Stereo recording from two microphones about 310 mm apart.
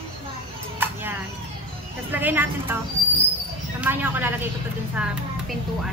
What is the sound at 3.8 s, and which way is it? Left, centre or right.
A woman's voice, centre.